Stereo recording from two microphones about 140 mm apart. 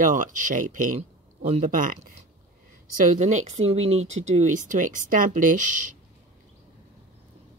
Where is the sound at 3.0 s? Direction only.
60° right (ahead or behind).